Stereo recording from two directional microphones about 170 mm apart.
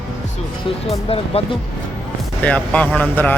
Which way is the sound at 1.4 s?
35° left (ahead or behind).